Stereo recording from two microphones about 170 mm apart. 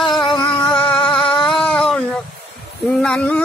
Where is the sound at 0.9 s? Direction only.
5° left (ahead or behind).